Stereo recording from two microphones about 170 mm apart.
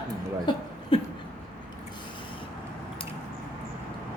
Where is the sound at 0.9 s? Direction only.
30° left (ahead or behind).